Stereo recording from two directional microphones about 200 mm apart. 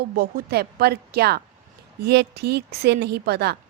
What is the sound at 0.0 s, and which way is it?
A woman's voice, 50° right (ahead or behind).